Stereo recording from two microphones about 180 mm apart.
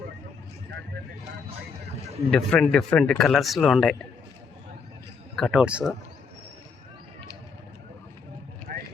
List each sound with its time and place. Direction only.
2.3 s speech: 5° left (ahead or behind)
5.4 s speech: 5° right (ahead or behind)
8.7 s vehicle: 50° right (ahead or behind)